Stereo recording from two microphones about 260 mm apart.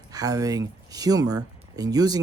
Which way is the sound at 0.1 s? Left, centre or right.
Centre.